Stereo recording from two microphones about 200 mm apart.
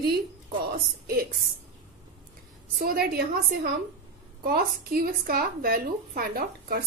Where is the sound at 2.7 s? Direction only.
50° right (ahead or behind).